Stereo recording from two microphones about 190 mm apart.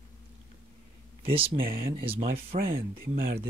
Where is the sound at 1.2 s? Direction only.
30° right (ahead or behind).